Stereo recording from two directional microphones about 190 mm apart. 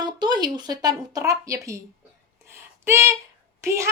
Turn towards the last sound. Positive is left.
turn(degrees=-15)  # may be behind; listen again after turning